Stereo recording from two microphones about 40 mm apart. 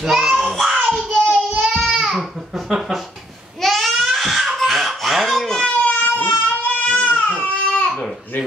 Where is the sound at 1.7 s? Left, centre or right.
Centre.